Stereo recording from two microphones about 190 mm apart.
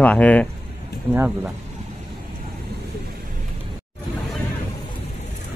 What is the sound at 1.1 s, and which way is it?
Speech, 10° right (ahead or behind).